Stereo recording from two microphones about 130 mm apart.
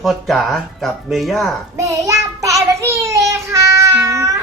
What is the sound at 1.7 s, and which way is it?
Child singing, 25° right (ahead or behind).